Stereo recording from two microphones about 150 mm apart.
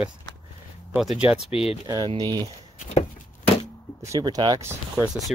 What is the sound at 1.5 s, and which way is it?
Speech, 40° left (ahead or behind).